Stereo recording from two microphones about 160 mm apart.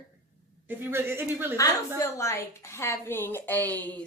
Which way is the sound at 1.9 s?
20° left (ahead or behind).